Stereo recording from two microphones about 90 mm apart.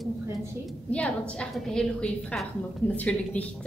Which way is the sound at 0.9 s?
10° left (ahead or behind).